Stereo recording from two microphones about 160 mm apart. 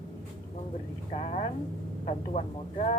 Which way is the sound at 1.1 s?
50° left (ahead or behind).